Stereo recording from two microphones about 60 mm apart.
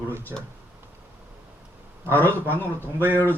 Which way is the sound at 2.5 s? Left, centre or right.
Left.